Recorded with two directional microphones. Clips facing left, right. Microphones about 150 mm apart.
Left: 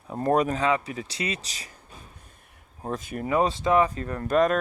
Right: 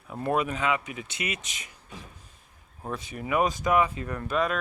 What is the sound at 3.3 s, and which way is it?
Speech, 30° left (ahead or behind).